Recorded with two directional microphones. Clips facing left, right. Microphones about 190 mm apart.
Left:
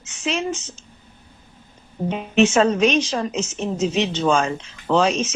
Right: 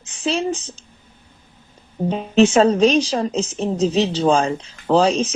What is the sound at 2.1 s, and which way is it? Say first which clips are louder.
Speech: right 3 dB; 35° right (ahead or behind).